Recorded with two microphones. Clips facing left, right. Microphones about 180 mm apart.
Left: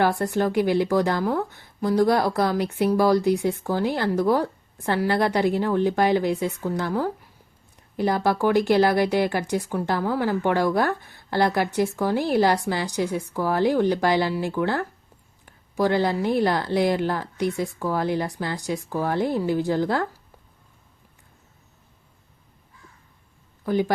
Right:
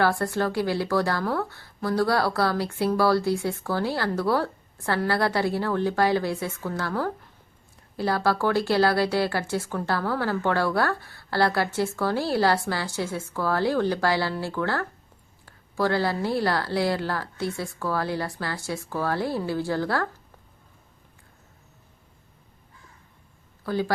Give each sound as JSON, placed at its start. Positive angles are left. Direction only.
{"t": 0.0, "sound": "a woman's voice", "side_deg": 20}
{"t": 23.6, "sound": "speech", "side_deg": 20}